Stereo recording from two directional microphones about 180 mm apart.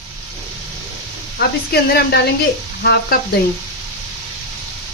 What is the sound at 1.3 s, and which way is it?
Speech, 65° left (ahead or behind).